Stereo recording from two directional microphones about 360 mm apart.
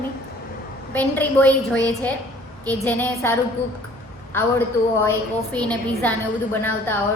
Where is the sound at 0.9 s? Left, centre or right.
Centre.